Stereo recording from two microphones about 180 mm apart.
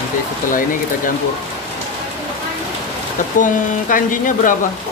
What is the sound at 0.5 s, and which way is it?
Speech, 50° left (ahead or behind).